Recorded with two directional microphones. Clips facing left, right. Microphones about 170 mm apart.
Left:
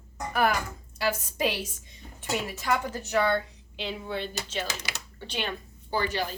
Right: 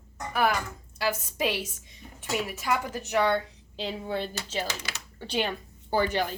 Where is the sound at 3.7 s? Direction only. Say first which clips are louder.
Right 2 dB; 40° right (ahead or behind).